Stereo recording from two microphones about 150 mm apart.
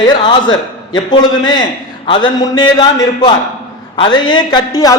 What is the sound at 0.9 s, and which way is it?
A man's voice, 30° left (ahead or behind).